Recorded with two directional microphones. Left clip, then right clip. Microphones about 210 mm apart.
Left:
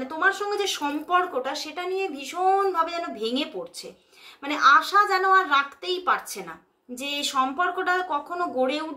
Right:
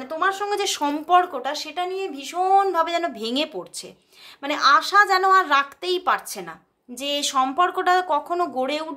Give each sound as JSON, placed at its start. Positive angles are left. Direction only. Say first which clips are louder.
{"t": 0.0, "sound": "speech", "louder": "right 1 dB", "side_deg": -40}